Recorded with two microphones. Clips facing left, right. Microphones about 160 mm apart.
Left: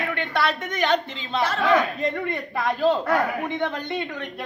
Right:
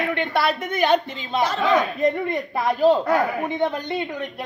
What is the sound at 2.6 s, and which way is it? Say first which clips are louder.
Speech: right 4 dB; 10° right (ahead or behind).